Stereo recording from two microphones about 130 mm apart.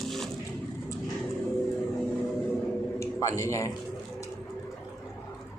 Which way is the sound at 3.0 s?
25° left (ahead or behind).